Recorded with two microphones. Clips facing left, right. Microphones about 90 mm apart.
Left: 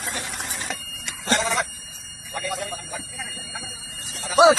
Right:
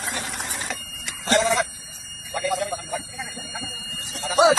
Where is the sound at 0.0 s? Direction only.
Centre (ahead or behind).